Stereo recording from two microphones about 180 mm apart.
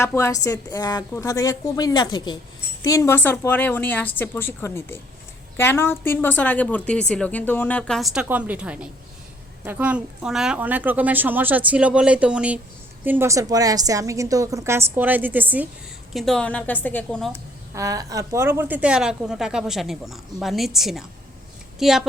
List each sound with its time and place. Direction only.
0.0 s a woman's voice: 15° left (ahead or behind); by 15.6 s 10° right (ahead or behind)
16.1 s a woman's voice: 5° left (ahead or behind)
17.7 s a woman's voice: 20° right (ahead or behind); by 22.0 s centre (ahead or behind)